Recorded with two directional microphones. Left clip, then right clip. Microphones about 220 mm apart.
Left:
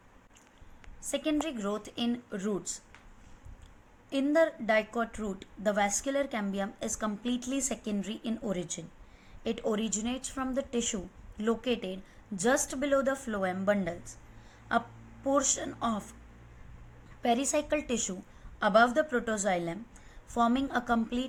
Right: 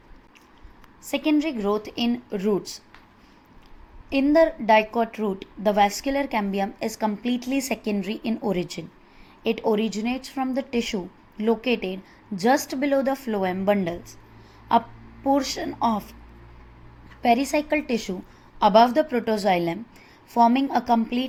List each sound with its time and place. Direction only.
1.1 s a woman's voice: 20° right (ahead or behind)
4.1 s a woman's voice: 20° right (ahead or behind)
15.3 s a woman's voice: 15° right (ahead or behind)
17.2 s a woman's voice: 15° right (ahead or behind)